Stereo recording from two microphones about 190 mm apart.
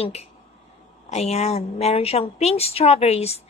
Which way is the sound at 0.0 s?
35° left (ahead or behind).